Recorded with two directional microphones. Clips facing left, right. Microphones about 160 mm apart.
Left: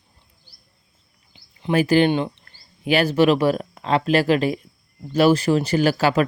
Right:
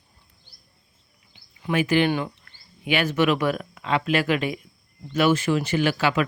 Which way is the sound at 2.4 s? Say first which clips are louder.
Left 5 dB; 35° left (ahead or behind).